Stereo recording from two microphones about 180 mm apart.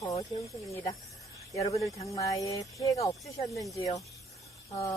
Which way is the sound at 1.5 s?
15° left (ahead or behind).